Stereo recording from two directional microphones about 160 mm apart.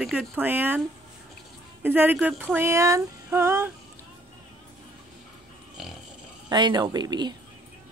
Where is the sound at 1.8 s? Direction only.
10° right (ahead or behind).